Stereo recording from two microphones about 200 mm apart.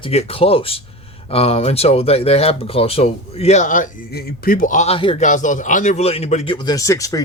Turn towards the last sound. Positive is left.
turn(degrees=15)  # may be behind; listen again after turning